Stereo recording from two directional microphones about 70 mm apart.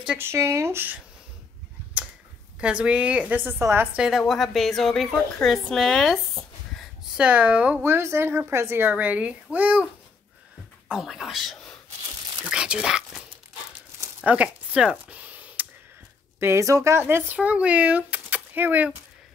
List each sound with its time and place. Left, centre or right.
0.2 s speech: right
2.6 s a woman's voice: centre; by 3.9 s right
3.9 s a woman's voice: centre
4.2 s a woman's voice: centre
7.1 s a woman's voice: centre
7.8 s speech: right
8.8 s a woman's voice: right
10.9 s a woman's voice: centre
14.2 s a sound: centre
16.3 s a woman's voice: right
16.6 s a woman's voice: right
17.0 s speech: right